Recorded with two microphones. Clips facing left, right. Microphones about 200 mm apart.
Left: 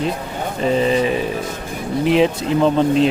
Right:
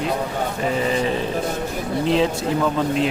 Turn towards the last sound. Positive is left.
turn(degrees=20)  # may be behind; listen again after turning